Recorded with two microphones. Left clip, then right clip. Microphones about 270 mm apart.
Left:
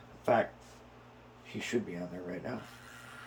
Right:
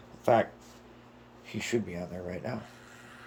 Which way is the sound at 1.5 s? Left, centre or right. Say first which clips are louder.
Right 3 dB; right.